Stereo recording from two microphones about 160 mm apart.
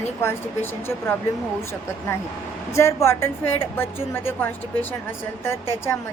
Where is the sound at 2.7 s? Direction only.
20° left (ahead or behind).